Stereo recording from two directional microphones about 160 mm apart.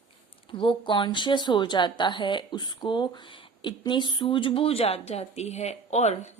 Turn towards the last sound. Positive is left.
turn(degrees=45)  # may be behind; listen again after turning